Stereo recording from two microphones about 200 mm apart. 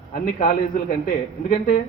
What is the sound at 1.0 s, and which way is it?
Speech, 40° left (ahead or behind).